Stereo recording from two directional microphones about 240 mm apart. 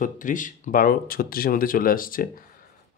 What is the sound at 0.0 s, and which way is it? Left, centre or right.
Speech, left.